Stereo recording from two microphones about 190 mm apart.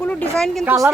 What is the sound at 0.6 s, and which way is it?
Speech, 15° right (ahead or behind).